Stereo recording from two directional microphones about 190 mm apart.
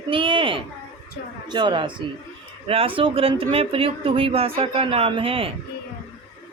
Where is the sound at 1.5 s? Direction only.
25° right (ahead or behind).